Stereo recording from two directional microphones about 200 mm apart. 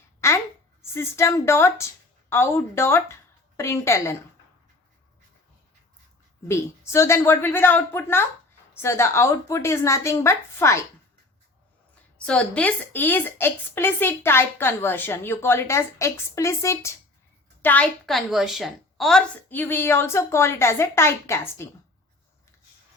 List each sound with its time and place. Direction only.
0.2 s a sound: 15° left (ahead or behind)
0.9 s a woman's voice: 15° left (ahead or behind)
6.5 s a woman's voice: 15° left (ahead or behind)
12.1 s a woman's voice: 5° left (ahead or behind)